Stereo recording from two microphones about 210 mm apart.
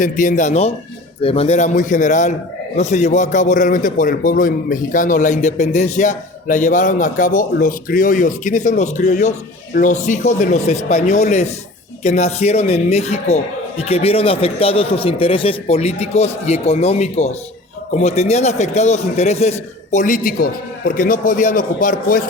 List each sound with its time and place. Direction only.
0.0 s a man's voice: 35° left (ahead or behind)